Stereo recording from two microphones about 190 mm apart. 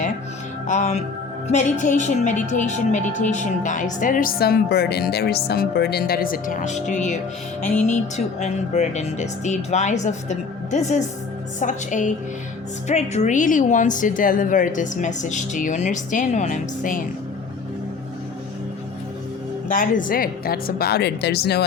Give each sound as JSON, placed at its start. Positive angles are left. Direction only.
{"t": 0.7, "sound": "a woman's voice", "side_deg": 40}
{"t": 19.6, "sound": "a woman's voice", "side_deg": 45}